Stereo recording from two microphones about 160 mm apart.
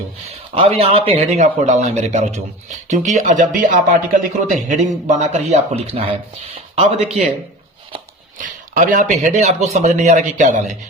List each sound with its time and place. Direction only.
0.3 s speech: 35° right (ahead or behind)
8.4 s speech: 55° right (ahead or behind)